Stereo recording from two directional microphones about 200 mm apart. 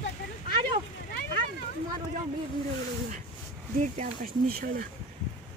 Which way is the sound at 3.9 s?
40° right (ahead or behind).